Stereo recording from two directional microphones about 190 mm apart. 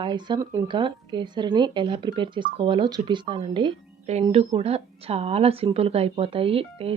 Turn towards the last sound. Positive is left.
turn(degrees=-30)  # may be behind; listen again after turning